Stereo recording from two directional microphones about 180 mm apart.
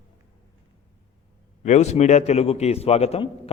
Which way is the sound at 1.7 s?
40° left (ahead or behind).